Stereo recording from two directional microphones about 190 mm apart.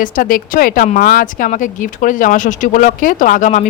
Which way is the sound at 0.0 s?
45° left (ahead or behind).